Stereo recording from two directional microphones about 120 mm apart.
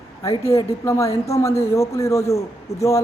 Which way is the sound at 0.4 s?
25° left (ahead or behind).